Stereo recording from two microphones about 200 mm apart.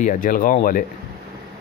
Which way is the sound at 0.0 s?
40° left (ahead or behind).